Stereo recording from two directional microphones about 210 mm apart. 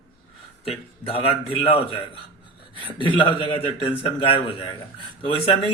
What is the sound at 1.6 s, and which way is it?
Speech, 25° left (ahead or behind).